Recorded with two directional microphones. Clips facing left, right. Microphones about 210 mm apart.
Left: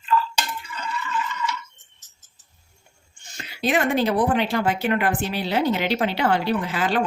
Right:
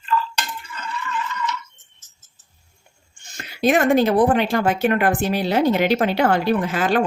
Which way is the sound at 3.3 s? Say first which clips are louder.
Right 5 dB; 45° right (ahead or behind).